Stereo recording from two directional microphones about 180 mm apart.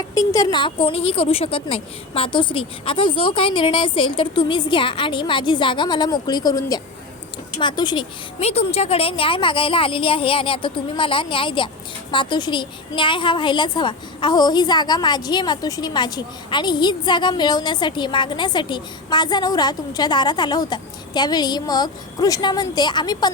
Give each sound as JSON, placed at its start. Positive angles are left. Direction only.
{"t": 0.1, "sound": "a woman's voice", "side_deg": 20}